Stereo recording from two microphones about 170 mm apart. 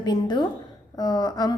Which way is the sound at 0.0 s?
25° left (ahead or behind).